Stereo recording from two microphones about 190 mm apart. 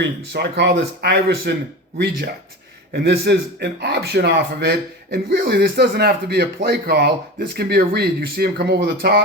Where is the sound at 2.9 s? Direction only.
55° right (ahead or behind).